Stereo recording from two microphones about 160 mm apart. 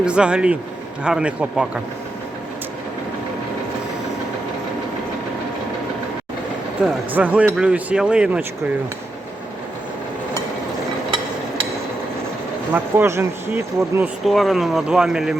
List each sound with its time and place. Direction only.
0.0 s speech: 5° right (ahead or behind)
7.1 s speech: 10° right (ahead or behind)
12.7 s speech: 15° right (ahead or behind)
14.3 s speech: centre (ahead or behind)